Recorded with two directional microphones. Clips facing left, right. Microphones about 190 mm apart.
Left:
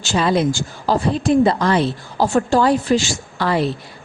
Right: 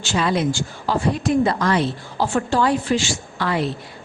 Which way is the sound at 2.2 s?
40° left (ahead or behind).